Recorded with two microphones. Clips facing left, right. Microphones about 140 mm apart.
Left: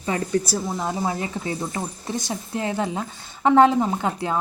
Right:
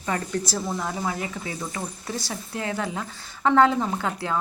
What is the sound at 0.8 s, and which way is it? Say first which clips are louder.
Speech: left 3 dB; 25° left (ahead or behind).